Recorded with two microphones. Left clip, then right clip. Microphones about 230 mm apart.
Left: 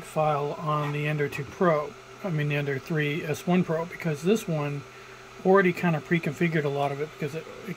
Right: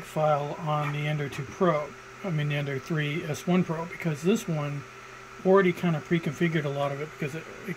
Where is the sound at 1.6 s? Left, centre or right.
Centre.